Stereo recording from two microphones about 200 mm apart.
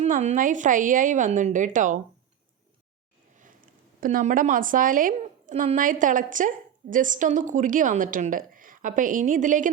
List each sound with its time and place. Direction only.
0.0 s a woman's voice: 35° right (ahead or behind)
4.0 s a woman's voice: 40° right (ahead or behind)